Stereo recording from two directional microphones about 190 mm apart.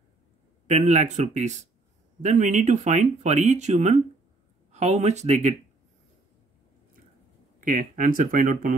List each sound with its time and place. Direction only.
0.7 s speech: 40° right (ahead or behind)
7.6 s speech: 45° right (ahead or behind)